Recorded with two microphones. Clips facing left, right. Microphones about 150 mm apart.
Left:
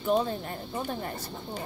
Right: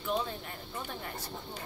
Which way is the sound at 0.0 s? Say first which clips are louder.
Left 7 dB; 40° left (ahead or behind).